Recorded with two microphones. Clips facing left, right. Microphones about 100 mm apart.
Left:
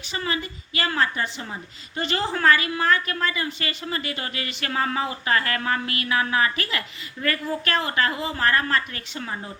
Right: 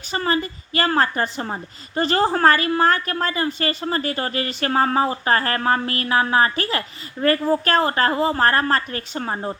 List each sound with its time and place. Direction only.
0.1 s a woman's voice: 40° right (ahead or behind)